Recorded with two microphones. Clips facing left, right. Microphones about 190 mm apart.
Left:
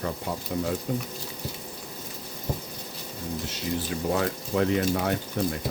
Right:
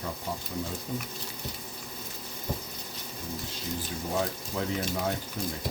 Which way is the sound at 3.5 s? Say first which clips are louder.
Left 6 dB; 70° left (ahead or behind).